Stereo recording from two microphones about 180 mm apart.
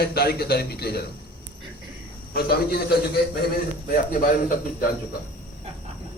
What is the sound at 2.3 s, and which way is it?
Speech, 55° left (ahead or behind).